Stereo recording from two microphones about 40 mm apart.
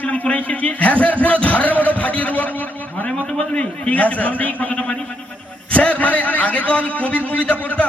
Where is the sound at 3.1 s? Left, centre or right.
Left.